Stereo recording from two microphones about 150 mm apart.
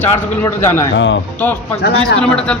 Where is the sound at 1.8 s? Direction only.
90° left.